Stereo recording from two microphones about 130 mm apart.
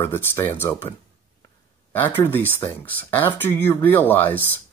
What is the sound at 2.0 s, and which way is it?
Speech, 15° left (ahead or behind).